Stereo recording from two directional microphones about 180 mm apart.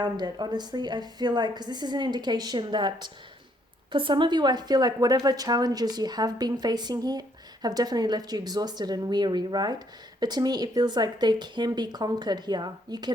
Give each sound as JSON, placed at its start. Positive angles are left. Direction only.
{"t": 0.0, "sound": "a woman's voice", "side_deg": -25}